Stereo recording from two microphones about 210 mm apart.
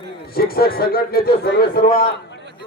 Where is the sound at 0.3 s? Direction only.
45° left (ahead or behind).